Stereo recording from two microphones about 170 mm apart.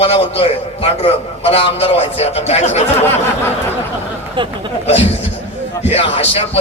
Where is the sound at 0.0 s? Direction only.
35° left (ahead or behind).